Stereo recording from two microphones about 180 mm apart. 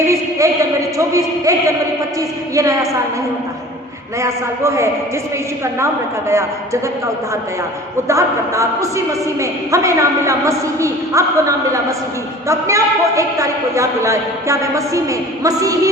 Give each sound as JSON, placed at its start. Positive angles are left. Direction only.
{"t": 0.1, "sound": "a man's voice", "side_deg": -15}
{"t": 4.2, "sound": "a man's voice", "side_deg": -15}
{"t": 8.0, "sound": "a man's voice", "side_deg": -15}